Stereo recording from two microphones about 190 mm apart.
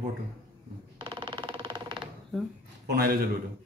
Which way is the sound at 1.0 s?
25° right (ahead or behind).